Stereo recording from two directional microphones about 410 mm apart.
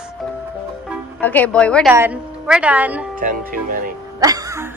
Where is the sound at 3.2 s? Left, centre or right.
Centre.